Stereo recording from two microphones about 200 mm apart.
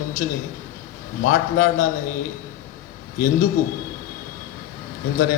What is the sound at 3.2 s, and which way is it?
Speech, 40° left (ahead or behind).